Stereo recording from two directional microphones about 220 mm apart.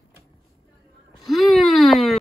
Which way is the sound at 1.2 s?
Centre (ahead or behind).